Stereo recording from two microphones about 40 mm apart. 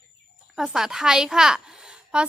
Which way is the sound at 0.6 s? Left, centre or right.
Centre.